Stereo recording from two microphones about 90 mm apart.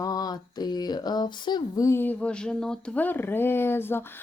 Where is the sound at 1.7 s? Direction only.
35° left (ahead or behind).